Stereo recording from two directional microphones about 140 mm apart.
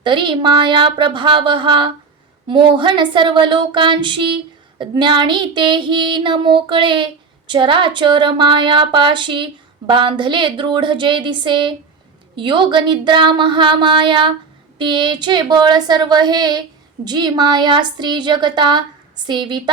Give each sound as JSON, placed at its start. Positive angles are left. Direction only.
{"t": 0.0, "sound": "female singing", "side_deg": -35}